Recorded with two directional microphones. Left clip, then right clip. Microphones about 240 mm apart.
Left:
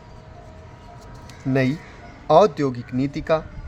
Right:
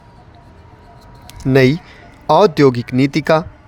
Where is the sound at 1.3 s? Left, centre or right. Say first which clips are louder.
Right 10 dB; right.